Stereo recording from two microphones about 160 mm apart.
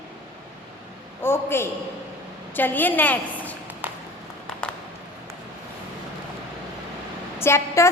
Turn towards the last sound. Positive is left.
turn(degrees=15)  # may be behind; listen again after turning